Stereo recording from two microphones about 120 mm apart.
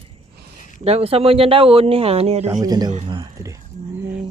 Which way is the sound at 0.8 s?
55° right (ahead or behind).